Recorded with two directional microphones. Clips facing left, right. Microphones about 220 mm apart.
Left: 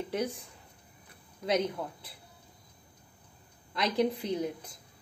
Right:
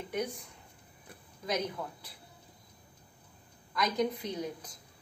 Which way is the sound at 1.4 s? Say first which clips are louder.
Left 5 dB; 25° left (ahead or behind).